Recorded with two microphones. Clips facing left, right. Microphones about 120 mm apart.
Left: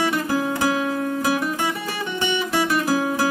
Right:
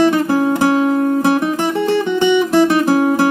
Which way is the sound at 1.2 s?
25° right (ahead or behind).